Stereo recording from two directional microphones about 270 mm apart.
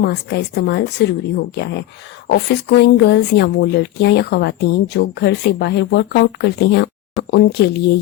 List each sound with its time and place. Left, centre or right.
0.0 s speech: left